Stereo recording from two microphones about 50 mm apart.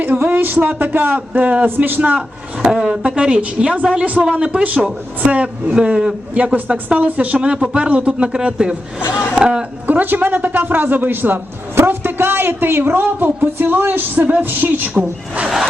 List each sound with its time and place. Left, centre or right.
0.3 s a sound: right
0.8 s a man's voice: right
1.3 s a woman's voice: right
2.6 s a man's voice: centre
2.9 s a woman's voice: right
5.8 s a man's voice: centre
9.8 s a man's voice: right
14.2 s a woman's voice: right
15.4 s zipper: centre